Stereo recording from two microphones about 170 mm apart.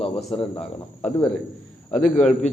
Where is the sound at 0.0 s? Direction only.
35° left (ahead or behind).